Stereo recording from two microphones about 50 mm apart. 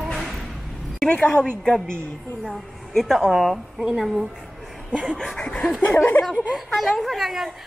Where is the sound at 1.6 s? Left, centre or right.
Centre.